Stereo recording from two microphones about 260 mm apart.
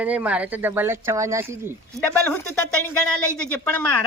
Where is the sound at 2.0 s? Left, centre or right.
Centre.